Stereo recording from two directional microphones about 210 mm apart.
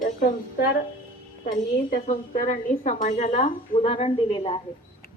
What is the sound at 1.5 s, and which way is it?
Speech, 40° left (ahead or behind).